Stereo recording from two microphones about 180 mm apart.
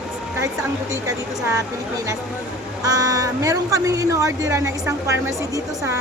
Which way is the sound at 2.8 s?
20° right (ahead or behind).